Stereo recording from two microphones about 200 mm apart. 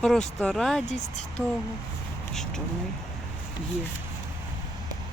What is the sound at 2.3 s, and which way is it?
Speech, centre (ahead or behind).